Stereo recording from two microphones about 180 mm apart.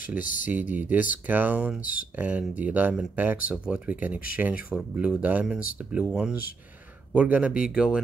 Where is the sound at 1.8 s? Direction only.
50° left (ahead or behind).